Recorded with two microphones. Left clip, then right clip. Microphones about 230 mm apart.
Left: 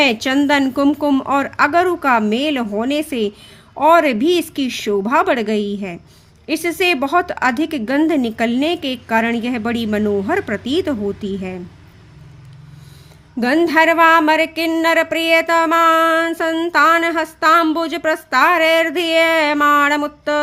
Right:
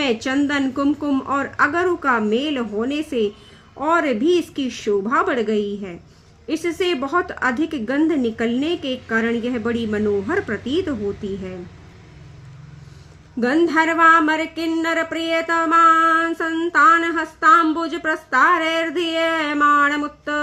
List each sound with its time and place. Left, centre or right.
0.0 s speech: left
13.4 s speech: left